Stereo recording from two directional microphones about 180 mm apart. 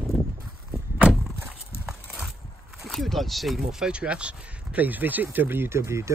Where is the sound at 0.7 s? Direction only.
5° right (ahead or behind).